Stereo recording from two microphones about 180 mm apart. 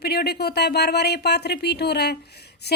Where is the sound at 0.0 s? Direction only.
65° left (ahead or behind).